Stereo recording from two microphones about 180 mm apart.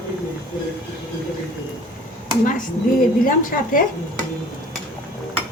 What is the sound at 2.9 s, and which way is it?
Speech, 50° left (ahead or behind).